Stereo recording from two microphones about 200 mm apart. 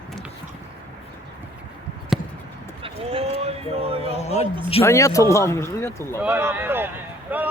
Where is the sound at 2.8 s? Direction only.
30° right (ahead or behind).